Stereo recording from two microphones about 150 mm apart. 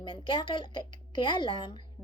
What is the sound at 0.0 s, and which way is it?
A woman's voice, 30° left (ahead or behind).